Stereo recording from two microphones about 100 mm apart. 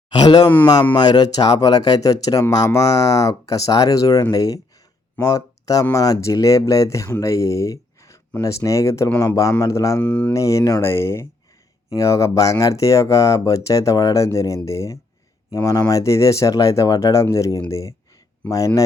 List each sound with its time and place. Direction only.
0.1 s speech: 50° left (ahead or behind); by 10.0 s 30° left (ahead or behind)
10.0 s speech: 15° left (ahead or behind)
10.3 s speech: 30° left (ahead or behind)